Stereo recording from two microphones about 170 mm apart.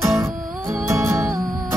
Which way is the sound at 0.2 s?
20° right (ahead or behind).